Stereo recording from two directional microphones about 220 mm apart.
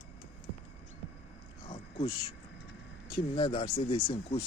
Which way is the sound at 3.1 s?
25° left (ahead or behind).